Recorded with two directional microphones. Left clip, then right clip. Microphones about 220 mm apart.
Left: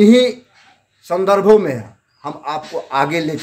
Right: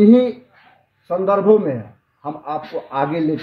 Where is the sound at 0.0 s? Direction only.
15° left (ahead or behind).